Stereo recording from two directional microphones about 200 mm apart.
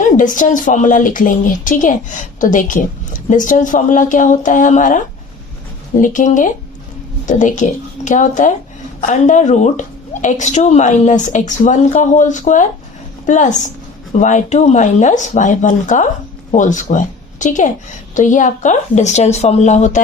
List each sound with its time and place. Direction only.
0.0 s a woman's voice: 40° left (ahead or behind)
6.0 s a woman's voice: 40° left (ahead or behind)